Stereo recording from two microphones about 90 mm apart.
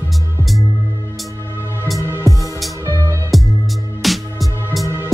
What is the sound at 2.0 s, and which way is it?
Music, 30° right (ahead or behind).